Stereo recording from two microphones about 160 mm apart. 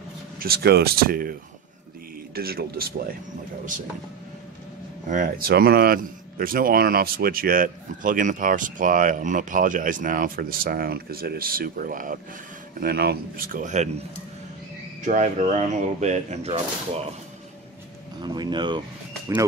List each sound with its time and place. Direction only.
0.4 s speech: 75° right (ahead or behind)
2.3 s speech: 75° right (ahead or behind)
5.0 s speech: 55° right (ahead or behind)
5.5 s speech: 75° right (ahead or behind); by 12.2 s 60° right (ahead or behind)
12.8 s speech: 80° right; by 13.8 s 55° right (ahead or behind)
15.0 s speech: 50° right (ahead or behind)
18.2 s speech: 25° right (ahead or behind)